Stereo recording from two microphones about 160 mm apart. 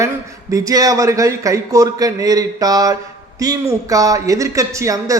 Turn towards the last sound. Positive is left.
turn(degrees=-20)  # may be behind; listen again after turning